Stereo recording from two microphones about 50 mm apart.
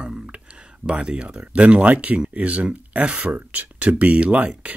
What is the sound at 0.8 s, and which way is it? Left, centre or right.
Speech, right.